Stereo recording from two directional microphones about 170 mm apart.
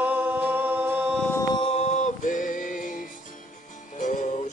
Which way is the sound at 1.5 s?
35° left (ahead or behind).